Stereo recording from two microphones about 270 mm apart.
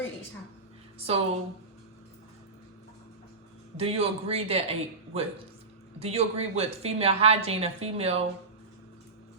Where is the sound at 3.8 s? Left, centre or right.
Right.